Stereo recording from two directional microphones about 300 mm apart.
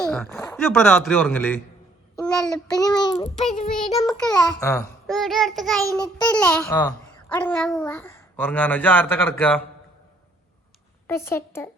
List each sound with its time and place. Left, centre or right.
0.0 s a child's voice: centre
2.7 s a child's voice: centre
5.0 s a child's voice: centre
5.9 s a child's voice: centre
11.0 s speech: centre